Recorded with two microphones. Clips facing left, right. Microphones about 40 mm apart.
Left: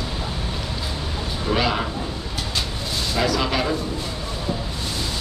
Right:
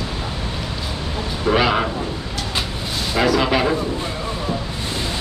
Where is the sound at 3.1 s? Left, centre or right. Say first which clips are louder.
Right 5 dB; centre.